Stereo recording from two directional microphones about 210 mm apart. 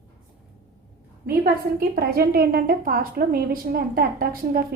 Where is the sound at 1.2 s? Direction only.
45° right (ahead or behind).